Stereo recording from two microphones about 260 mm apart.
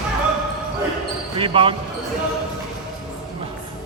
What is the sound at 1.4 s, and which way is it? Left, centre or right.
Speech, centre.